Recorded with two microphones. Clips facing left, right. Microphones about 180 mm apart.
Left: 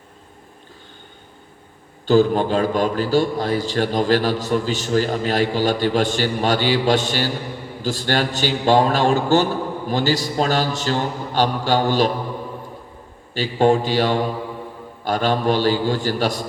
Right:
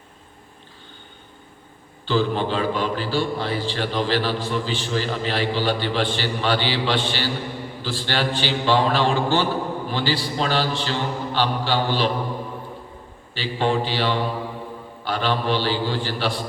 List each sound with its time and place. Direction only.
2.0 s a man's voice: 45° left (ahead or behind)
13.3 s a man's voice: 45° left (ahead or behind)